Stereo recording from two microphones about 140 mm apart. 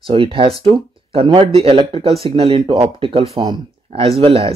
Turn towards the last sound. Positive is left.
turn(degrees=-45)  # may be behind; listen again after turning